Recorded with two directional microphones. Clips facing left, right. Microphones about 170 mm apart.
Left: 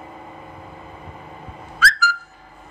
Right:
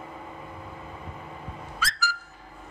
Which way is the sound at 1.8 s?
90° left.